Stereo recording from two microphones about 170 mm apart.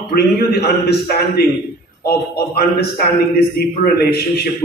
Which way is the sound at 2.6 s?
65° left (ahead or behind).